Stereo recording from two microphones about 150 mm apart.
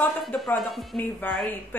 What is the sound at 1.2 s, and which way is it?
Speech, 10° left (ahead or behind).